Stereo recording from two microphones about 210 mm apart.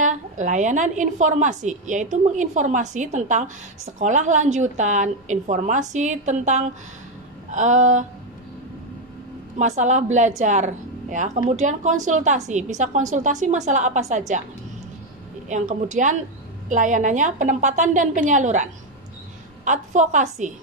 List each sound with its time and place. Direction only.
0.0 s a woman's voice: 35° right (ahead or behind)
9.6 s a woman's voice: 35° right (ahead or behind)
15.4 s a woman's voice: 35° right (ahead or behind)